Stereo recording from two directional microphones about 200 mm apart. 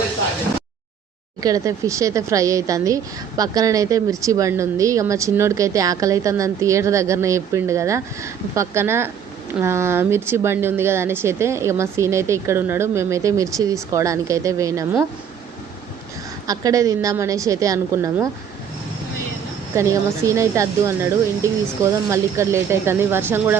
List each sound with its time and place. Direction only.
1.4 s speech: 15° right (ahead or behind)
16.5 s speech: 15° right (ahead or behind)
19.7 s speech: 15° right (ahead or behind)